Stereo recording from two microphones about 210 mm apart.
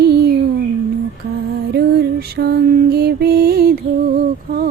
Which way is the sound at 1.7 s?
50° right (ahead or behind).